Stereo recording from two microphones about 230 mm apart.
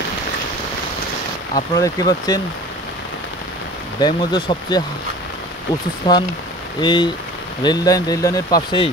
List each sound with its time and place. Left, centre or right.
1.5 s speech: centre
4.0 s speech: left
6.0 s speech: centre